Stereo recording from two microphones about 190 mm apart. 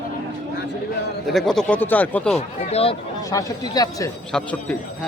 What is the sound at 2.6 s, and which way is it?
Speech, 35° left (ahead or behind).